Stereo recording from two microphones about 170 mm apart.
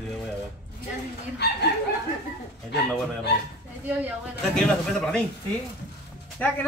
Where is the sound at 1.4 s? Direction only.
75° left (ahead or behind).